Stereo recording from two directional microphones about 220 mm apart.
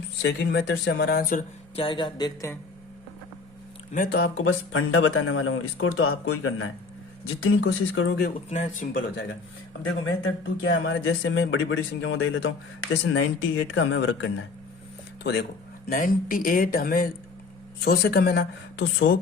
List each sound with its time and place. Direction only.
0.2 s speech: 50° left (ahead or behind)
1.7 s speech: 25° left (ahead or behind)
3.9 s speech: 45° left (ahead or behind); by 8.1 s 70° left (ahead or behind)
8.4 s speech: 30° left (ahead or behind)
10.2 s speech: 55° left (ahead or behind)
15.2 s speech: 50° left (ahead or behind)